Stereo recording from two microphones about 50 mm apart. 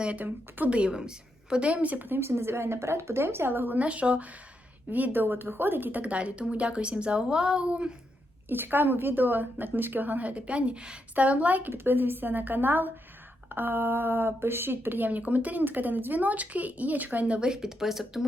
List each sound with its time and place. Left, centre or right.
0.0 s speech: right
0.7 s a woman's voice: centre
2.0 s speech: right
3.8 s a woman's voice: right
8.4 s speech: right
11.7 s speech: right
17.5 s speech: centre